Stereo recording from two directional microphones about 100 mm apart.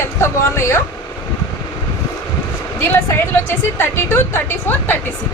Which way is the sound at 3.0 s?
25° left (ahead or behind).